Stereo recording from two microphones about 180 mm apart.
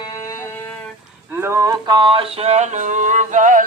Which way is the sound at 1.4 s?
15° right (ahead or behind).